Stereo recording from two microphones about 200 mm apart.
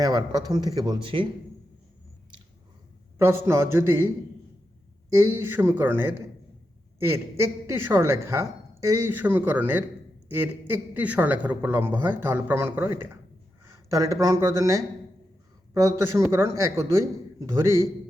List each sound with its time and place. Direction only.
0.0 s speech: 20° right (ahead or behind)
3.2 s a man's voice: 15° right (ahead or behind)
5.1 s a man's voice: 15° right (ahead or behind)